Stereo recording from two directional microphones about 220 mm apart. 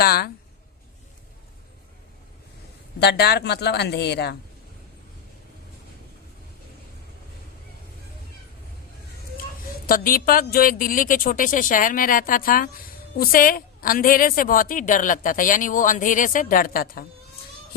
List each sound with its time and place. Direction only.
0.0 s a sound: 45° left (ahead or behind)
3.0 s a woman's voice: 50° left (ahead or behind)
9.8 s a woman's voice: 40° left (ahead or behind)